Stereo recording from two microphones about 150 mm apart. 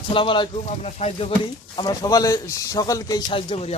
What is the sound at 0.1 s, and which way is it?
Speech, 35° left (ahead or behind).